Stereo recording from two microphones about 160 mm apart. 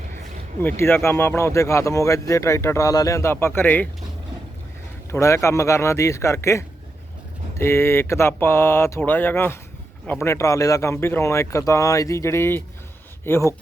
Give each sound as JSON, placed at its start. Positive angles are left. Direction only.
{"t": 0.6, "sound": "speech", "side_deg": 15}
{"t": 5.1, "sound": "speech", "side_deg": 20}